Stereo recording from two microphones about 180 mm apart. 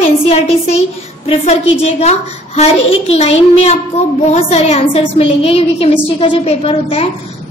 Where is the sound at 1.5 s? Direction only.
35° left (ahead or behind).